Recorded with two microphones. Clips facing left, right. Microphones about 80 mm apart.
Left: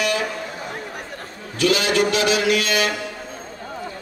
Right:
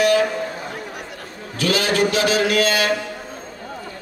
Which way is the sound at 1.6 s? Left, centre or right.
Right.